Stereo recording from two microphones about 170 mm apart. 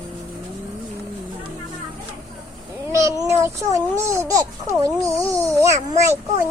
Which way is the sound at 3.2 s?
15° right (ahead or behind).